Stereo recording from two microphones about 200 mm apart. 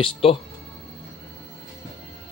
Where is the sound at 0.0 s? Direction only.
30° left (ahead or behind).